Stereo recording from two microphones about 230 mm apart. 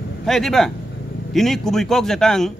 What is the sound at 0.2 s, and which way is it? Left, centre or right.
Speech, centre.